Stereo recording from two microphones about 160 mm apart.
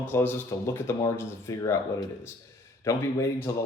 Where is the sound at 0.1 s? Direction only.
15° left (ahead or behind).